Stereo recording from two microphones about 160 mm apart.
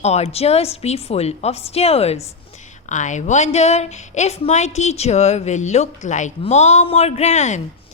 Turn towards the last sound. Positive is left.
turn(degrees=45)  # may be behind; listen again after turning